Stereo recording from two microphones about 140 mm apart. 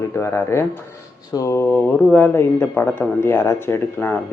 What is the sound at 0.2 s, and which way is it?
Speech, 20° left (ahead or behind).